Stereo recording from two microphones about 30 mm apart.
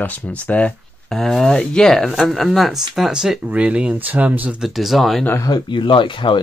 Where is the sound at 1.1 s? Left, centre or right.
Centre.